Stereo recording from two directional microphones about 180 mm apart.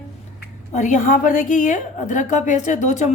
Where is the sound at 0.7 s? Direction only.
45° left (ahead or behind).